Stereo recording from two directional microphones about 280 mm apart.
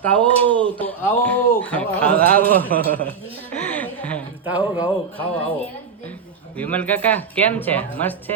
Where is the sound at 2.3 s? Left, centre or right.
Right.